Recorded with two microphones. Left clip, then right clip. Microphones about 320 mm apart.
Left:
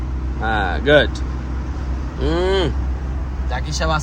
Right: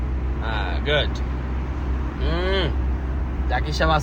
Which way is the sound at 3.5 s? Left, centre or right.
Centre.